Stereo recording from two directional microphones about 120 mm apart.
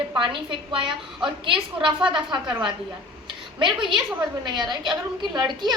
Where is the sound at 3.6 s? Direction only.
45° right (ahead or behind).